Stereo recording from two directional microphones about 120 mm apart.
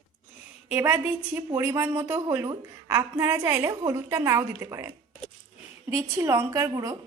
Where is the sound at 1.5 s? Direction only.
25° right (ahead or behind).